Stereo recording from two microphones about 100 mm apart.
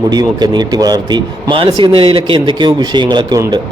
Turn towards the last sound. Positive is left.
turn(degrees=-50)  # may be behind; listen again after turning